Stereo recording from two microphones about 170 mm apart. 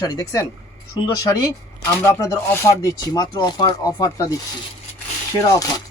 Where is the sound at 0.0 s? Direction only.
20° left (ahead or behind).